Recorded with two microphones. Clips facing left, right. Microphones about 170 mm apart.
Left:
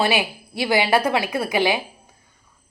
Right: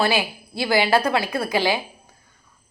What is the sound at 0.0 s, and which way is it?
Speech, 20° left (ahead or behind).